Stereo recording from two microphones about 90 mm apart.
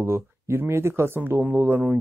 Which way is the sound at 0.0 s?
25° right (ahead or behind).